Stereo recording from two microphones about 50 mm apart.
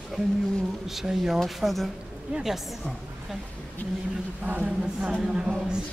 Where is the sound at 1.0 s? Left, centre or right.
Centre.